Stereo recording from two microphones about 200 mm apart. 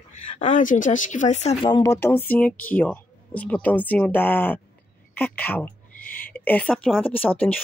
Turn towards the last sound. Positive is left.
turn(degrees=10)  # may be behind; listen again after turning